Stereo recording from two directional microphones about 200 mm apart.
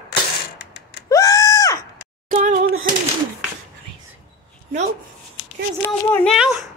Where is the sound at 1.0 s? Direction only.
15° left (ahead or behind).